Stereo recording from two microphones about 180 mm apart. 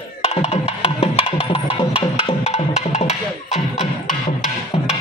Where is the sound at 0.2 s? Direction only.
35° left (ahead or behind).